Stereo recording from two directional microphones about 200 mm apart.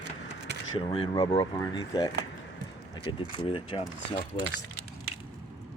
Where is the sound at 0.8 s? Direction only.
25° left (ahead or behind).